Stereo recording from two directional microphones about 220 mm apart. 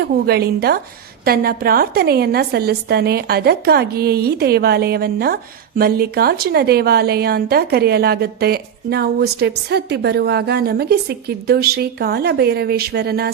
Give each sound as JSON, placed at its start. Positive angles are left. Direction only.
{"t": 0.0, "sound": "a woman's voice", "side_deg": -45}